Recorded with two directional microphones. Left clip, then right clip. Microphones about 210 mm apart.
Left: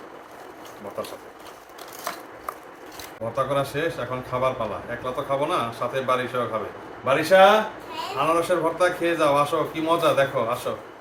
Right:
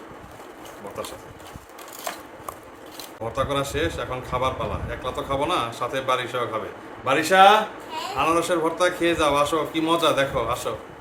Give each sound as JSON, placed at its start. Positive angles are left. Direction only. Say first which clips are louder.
{"t": 1.0, "sound": "a man's voice", "louder": "left 1 dB", "side_deg": -45}
{"t": 3.3, "sound": "a man's voice", "louder": "even", "side_deg": -45}